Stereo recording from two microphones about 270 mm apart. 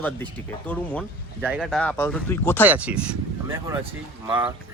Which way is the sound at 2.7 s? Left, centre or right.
Centre.